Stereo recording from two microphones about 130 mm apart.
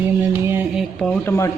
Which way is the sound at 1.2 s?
20° left (ahead or behind).